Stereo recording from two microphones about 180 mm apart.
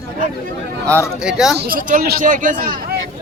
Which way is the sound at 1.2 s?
5° right (ahead or behind).